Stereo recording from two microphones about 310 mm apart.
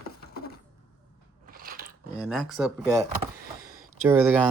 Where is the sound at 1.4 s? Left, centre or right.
Right.